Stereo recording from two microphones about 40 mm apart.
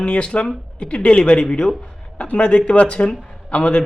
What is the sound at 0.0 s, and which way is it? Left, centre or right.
Speech, left.